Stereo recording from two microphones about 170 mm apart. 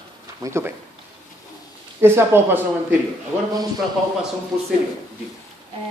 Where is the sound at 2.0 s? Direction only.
15° right (ahead or behind).